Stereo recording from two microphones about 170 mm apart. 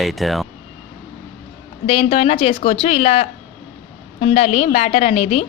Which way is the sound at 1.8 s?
35° left (ahead or behind).